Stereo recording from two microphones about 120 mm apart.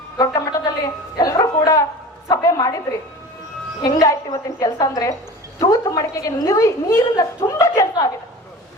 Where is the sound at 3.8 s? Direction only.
30° left (ahead or behind).